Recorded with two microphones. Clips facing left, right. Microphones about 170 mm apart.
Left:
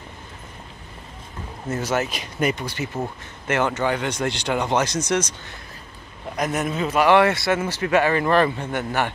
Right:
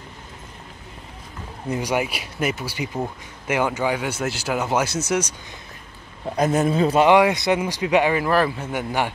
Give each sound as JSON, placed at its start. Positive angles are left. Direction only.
{"t": 1.7, "sound": "speech", "side_deg": -15}
{"t": 6.3, "sound": "a man's voice", "side_deg": -30}
{"t": 7.1, "sound": "speech", "side_deg": -15}
{"t": 8.2, "sound": "a man's voice", "side_deg": -5}